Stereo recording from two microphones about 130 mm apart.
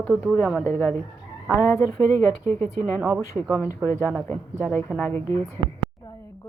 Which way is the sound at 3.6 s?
25° left (ahead or behind).